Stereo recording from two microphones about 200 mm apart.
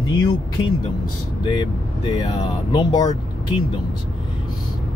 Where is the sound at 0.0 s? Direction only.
20° left (ahead or behind).